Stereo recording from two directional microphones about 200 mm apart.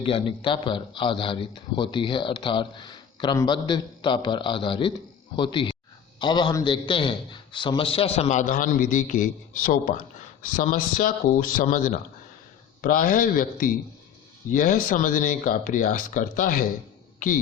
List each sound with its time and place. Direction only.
0.0 s a man's voice: 25° left (ahead or behind); by 16.6 s 45° left (ahead or behind)